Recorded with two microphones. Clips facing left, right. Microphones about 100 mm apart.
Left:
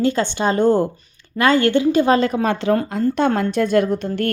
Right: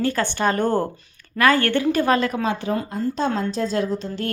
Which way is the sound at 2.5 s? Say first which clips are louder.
Left 6 dB; 80° left.